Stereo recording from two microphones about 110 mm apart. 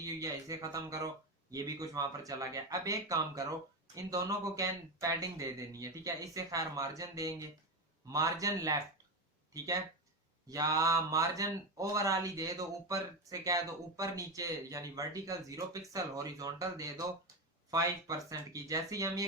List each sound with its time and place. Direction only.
0.0 s speech: 30° right (ahead or behind)
18.3 s speech: 30° right (ahead or behind)